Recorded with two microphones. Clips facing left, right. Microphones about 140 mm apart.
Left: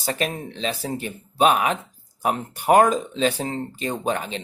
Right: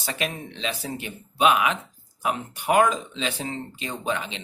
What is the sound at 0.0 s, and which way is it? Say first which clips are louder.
Speech: left 4 dB; 40° left (ahead or behind).